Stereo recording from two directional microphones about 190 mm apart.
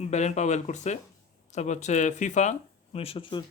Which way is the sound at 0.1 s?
35° left (ahead or behind).